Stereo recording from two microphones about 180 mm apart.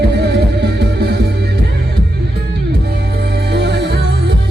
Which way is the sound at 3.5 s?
70° right (ahead or behind).